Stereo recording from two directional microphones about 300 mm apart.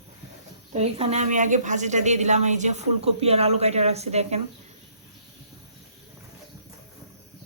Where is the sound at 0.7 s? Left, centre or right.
Right.